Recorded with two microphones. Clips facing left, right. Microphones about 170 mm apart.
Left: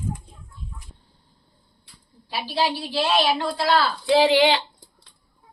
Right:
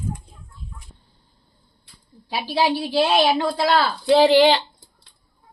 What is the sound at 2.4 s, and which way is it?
A woman's voice, 50° right (ahead or behind).